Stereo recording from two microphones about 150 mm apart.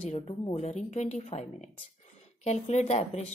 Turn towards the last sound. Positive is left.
turn(degrees=45)  # may be behind; listen again after turning